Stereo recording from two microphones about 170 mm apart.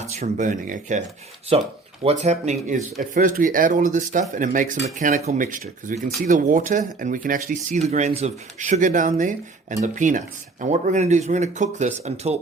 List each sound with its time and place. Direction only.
0.0 s speech: 45° right (ahead or behind)
1.5 s speech: 35° right (ahead or behind)